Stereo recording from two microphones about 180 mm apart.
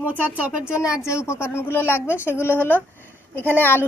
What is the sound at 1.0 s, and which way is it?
A woman's voice, 15° left (ahead or behind).